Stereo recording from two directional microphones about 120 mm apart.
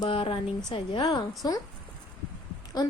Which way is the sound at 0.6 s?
40° left (ahead or behind).